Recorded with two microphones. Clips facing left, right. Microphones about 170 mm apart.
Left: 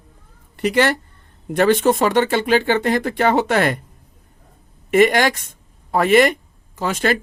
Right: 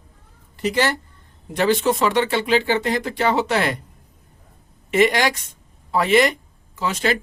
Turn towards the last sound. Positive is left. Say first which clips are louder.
# left 2 dB
turn(degrees=50)  # may be behind; listen again after turning